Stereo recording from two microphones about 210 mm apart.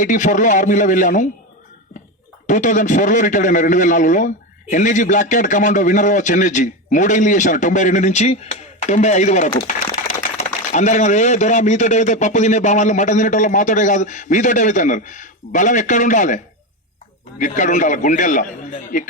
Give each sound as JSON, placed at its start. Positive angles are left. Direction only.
{"t": 0.0, "sound": "speech", "side_deg": 35}
{"t": 2.5, "sound": "speech", "side_deg": 35}